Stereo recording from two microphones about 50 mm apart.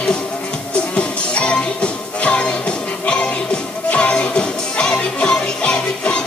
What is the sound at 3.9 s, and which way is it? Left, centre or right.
Music, left.